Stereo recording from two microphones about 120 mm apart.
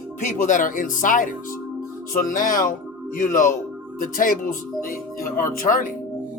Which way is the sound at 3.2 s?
90° left.